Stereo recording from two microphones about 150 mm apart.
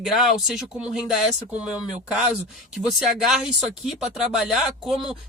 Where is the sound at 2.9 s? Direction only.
Centre (ahead or behind).